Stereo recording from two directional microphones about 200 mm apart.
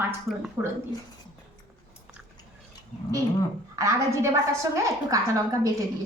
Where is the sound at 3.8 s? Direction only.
15° right (ahead or behind).